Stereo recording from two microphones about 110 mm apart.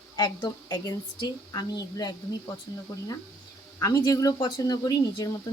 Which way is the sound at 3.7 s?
30° left (ahead or behind).